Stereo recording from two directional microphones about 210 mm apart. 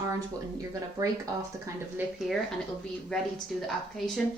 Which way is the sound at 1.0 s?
20° right (ahead or behind).